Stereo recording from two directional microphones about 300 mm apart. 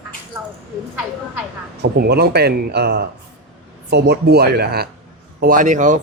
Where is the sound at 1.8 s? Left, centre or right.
Right.